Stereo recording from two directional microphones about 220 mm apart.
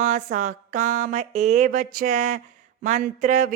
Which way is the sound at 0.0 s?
35° right (ahead or behind).